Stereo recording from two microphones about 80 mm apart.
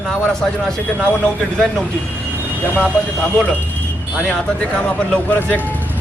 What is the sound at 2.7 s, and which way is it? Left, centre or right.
Speech, centre.